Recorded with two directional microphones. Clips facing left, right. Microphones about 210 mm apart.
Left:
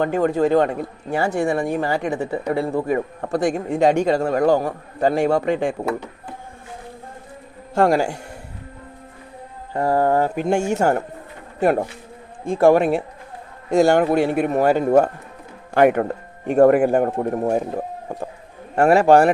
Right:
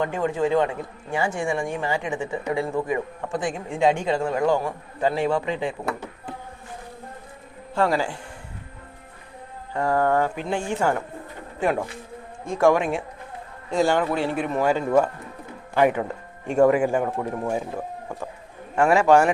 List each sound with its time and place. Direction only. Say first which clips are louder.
0.0 s a man's voice: left 5 dB; 40° left (ahead or behind)
7.8 s a man's voice: left 5 dB; 45° left (ahead or behind)
9.7 s a man's voice: left 3 dB; 35° left (ahead or behind); by 17.1 s 60° left (ahead or behind)
17.1 s a man's voice: left 6 dB; 35° left (ahead or behind)